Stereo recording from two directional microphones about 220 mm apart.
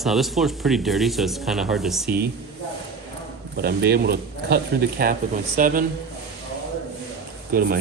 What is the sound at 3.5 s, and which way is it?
A man's voice, 45° right (ahead or behind).